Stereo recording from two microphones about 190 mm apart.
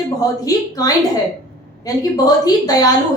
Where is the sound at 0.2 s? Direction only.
20° left (ahead or behind).